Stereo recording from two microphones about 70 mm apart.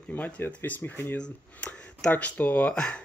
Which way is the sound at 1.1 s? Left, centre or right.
Centre.